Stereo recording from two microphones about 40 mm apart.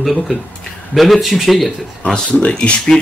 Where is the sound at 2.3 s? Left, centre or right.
Left.